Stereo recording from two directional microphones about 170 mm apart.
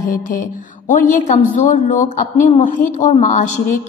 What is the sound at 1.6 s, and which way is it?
Speech, 45° left (ahead or behind).